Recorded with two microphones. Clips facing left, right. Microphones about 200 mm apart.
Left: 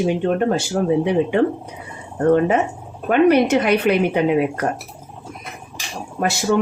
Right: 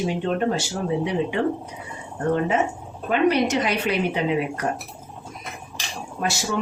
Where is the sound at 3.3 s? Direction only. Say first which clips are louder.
Left 7 dB; 60° left (ahead or behind).